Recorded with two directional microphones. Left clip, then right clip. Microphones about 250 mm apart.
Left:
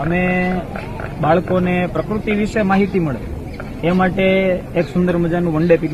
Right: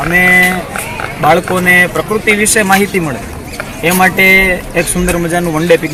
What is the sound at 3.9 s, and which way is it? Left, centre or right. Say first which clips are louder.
Speech: right 8 dB; centre.